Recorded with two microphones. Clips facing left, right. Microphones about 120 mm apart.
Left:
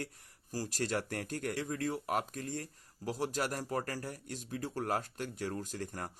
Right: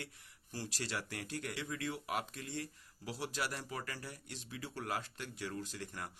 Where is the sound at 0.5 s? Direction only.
40° left (ahead or behind).